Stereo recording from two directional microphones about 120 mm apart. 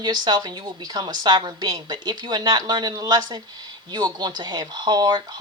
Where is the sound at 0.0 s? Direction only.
35° right (ahead or behind).